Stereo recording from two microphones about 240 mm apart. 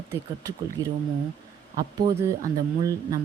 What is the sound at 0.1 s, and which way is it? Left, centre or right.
Speech, centre.